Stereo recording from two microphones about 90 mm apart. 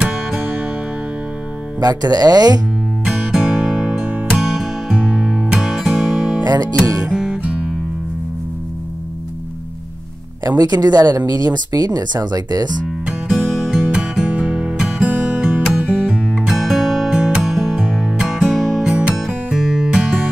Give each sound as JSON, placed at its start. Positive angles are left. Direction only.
{"t": 0.0, "sound": "music", "side_deg": -10}
{"t": 1.8, "sound": "speech", "side_deg": -45}
{"t": 3.1, "sound": "music", "side_deg": -10}
{"t": 6.4, "sound": "music", "side_deg": -45}
{"t": 7.1, "sound": "music", "side_deg": -10}
{"t": 10.6, "sound": "speech", "side_deg": -50}
{"t": 12.8, "sound": "music", "side_deg": -5}